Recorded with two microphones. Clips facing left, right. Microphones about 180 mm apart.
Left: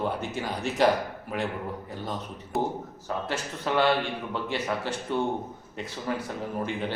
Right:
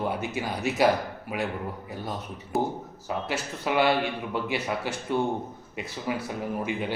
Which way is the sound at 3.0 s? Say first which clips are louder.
Right 1 dB; 10° right (ahead or behind).